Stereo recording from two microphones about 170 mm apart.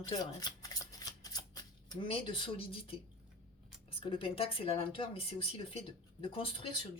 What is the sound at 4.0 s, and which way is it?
A woman's voice, 30° left (ahead or behind).